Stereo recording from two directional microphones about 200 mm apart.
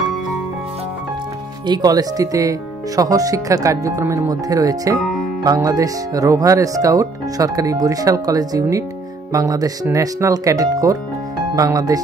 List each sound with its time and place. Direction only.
1.7 s speech: 20° right (ahead or behind)